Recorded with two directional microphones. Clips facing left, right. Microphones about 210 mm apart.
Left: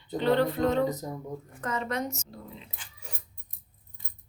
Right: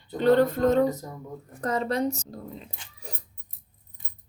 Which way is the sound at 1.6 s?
35° right (ahead or behind).